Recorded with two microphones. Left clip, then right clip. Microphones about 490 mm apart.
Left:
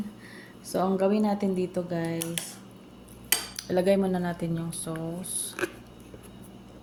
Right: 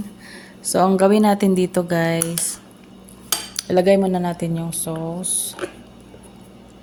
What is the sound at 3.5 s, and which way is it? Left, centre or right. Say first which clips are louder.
Speech: right 10 dB; left.